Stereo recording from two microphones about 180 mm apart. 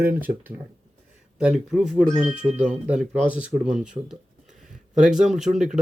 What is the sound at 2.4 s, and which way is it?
Speech, 40° right (ahead or behind).